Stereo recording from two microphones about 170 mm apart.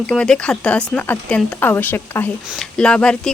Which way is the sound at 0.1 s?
5° left (ahead or behind).